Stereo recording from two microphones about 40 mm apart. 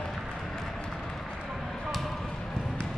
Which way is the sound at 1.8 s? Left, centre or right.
Centre.